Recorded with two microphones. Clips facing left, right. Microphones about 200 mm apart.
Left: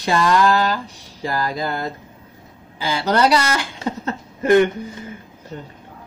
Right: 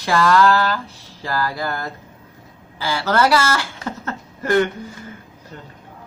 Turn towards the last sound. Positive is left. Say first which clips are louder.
# left 4 dB
turn(degrees=20)  # may be behind; listen again after turning